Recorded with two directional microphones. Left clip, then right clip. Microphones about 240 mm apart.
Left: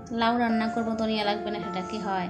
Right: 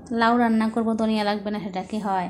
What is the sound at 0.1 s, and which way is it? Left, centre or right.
A woman's voice, centre.